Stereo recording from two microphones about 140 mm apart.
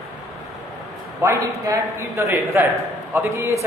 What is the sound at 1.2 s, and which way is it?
A man's voice, 20° right (ahead or behind).